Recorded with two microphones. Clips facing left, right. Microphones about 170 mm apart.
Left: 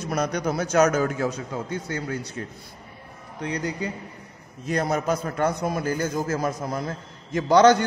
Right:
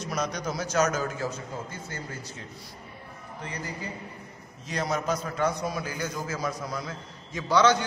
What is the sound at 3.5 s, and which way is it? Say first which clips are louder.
Speech: left 9 dB; 75° left (ahead or behind).